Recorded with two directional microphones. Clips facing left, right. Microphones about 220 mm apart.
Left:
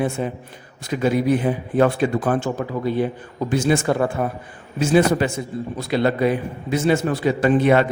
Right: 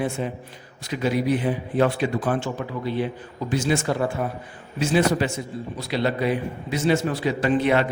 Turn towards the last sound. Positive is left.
turn(degrees=50)  # may be behind; listen again after turning